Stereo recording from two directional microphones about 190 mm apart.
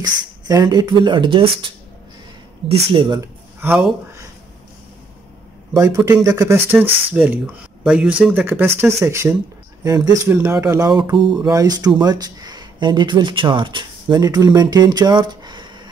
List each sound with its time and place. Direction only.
0.0 s speech: 20° right (ahead or behind)
2.7 s speech: 25° right (ahead or behind)
3.6 s speech: 10° right (ahead or behind)
5.7 s speech: 15° right (ahead or behind)